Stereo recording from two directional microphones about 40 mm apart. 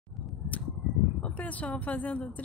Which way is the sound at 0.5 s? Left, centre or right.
Left.